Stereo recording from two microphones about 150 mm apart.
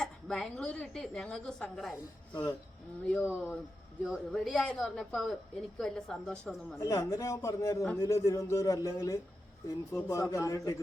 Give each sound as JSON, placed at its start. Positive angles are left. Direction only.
{"t": 0.0, "sound": "a woman's voice", "side_deg": 5}
{"t": 6.7, "sound": "speech", "side_deg": 20}